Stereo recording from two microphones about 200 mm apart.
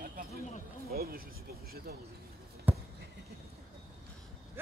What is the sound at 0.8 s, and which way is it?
Speech, 50° right (ahead or behind).